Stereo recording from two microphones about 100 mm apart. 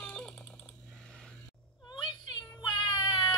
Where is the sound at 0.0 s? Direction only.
10° left (ahead or behind).